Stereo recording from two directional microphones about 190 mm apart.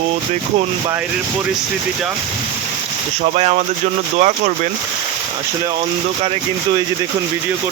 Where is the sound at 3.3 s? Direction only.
35° right (ahead or behind).